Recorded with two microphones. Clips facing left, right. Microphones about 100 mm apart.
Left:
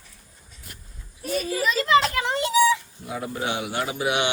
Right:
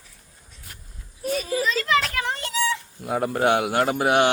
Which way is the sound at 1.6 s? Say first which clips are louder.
Left 5 dB; 15° left (ahead or behind).